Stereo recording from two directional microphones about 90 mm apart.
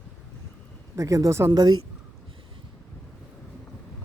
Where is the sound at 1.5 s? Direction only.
50° right (ahead or behind).